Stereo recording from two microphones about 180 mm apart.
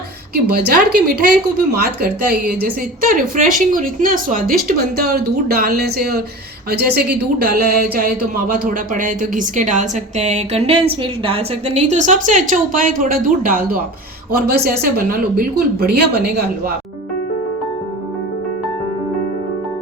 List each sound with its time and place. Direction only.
0.5 s a woman's voice: 60° right (ahead or behind)